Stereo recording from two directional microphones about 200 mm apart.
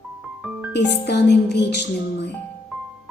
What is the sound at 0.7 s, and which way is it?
Speech, 60° left (ahead or behind).